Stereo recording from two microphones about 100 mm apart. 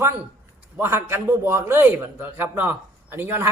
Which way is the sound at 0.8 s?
25° right (ahead or behind).